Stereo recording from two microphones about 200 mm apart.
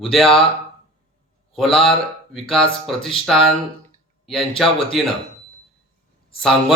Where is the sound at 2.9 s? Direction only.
25° left (ahead or behind).